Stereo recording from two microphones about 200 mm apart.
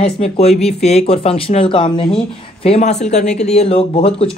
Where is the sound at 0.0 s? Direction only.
30° left (ahead or behind).